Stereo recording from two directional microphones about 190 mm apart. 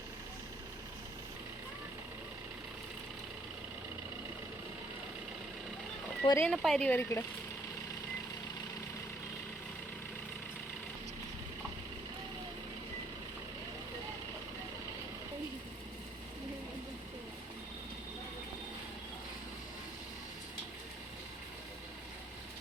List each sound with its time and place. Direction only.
6.2 s speech: 15° left (ahead or behind)
6.5 s speech: centre (ahead or behind)